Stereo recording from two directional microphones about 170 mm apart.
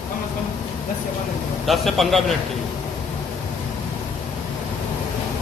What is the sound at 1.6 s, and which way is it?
Speech, centre (ahead or behind).